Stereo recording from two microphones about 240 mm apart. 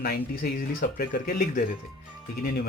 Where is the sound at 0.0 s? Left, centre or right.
Left.